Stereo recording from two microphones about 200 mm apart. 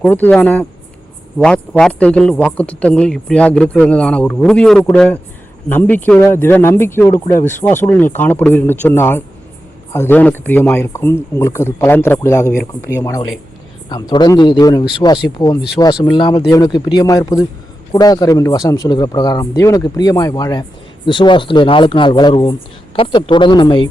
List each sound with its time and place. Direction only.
0.0 s speech: 5° left (ahead or behind); by 23.9 s 25° left (ahead or behind)